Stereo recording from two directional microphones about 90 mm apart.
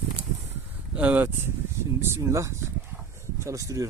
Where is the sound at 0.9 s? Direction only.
15° right (ahead or behind).